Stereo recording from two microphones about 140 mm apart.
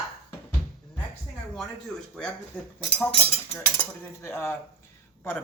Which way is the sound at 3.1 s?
45° left (ahead or behind).